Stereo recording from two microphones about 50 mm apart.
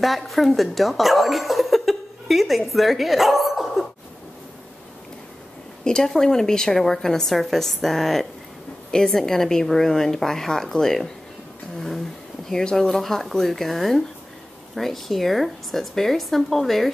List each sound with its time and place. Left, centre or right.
0.0 s speech: centre
5.9 s a woman's voice: centre
12.4 s a woman's voice: centre